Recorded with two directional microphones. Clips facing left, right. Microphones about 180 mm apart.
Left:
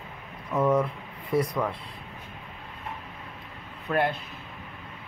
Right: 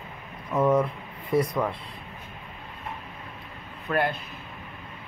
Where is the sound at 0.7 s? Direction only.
Centre (ahead or behind).